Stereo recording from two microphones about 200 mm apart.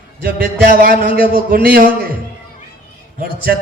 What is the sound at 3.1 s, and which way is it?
Speech, 50° right (ahead or behind).